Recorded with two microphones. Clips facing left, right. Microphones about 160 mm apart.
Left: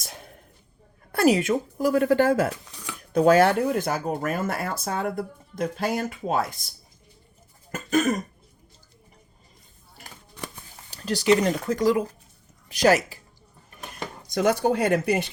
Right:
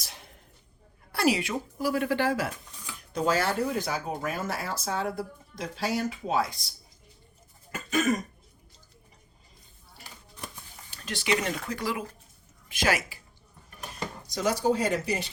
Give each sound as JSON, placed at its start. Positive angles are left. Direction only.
{"t": 0.0, "sound": "a sound", "side_deg": 50}
{"t": 1.1, "sound": "speech", "side_deg": 45}
{"t": 2.5, "sound": "speech", "side_deg": 80}
{"t": 7.7, "sound": "cough", "side_deg": 45}
{"t": 10.9, "sound": "a woman's voice", "side_deg": 40}
{"t": 14.3, "sound": "speech", "side_deg": 60}